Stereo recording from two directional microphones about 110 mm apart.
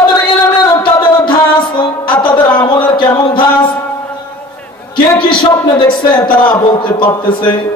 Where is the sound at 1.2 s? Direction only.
45° left (ahead or behind).